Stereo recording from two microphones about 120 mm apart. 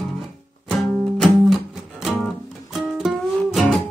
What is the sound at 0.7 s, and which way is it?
Music, centre (ahead or behind).